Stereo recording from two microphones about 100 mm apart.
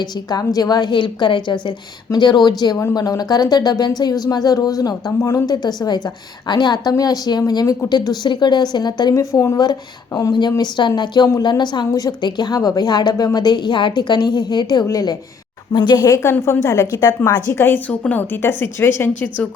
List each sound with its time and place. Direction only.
0.0 s a woman's voice: 45° left (ahead or behind)
9.1 s a woman's voice: 30° left (ahead or behind)
10.6 s a woman's voice: 50° left (ahead or behind)
16.0 s speech: 30° left (ahead or behind)
17.2 s a woman's voice: 25° left (ahead or behind)